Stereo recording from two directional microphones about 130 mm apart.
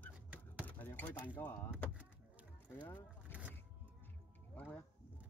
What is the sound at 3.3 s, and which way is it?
Vehicle, 10° right (ahead or behind).